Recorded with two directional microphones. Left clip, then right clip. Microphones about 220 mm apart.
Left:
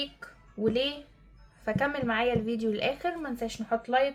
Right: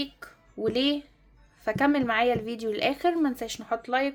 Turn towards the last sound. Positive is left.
turn(degrees=-50)  # may be behind; listen again after turning